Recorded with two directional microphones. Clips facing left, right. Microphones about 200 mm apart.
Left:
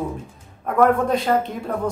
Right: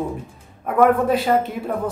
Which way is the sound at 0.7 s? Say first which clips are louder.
Right 1 dB; 5° right (ahead or behind).